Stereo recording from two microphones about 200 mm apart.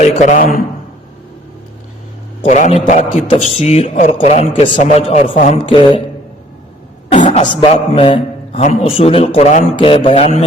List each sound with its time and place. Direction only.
0.0 s a man's voice: 35° left (ahead or behind)
2.4 s a man's voice: 40° left (ahead or behind)
7.1 s a man's voice: 35° left (ahead or behind)